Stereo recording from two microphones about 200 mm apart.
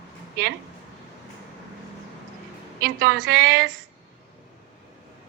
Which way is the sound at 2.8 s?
50° right (ahead or behind).